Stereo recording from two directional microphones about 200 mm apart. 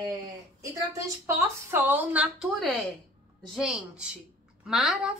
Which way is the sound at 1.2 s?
10° right (ahead or behind).